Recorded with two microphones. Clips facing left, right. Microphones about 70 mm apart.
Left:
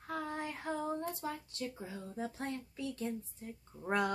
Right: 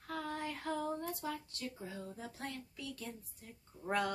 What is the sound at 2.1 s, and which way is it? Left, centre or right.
Speech, left.